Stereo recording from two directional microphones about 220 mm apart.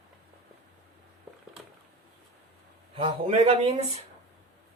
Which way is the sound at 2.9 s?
25° right (ahead or behind).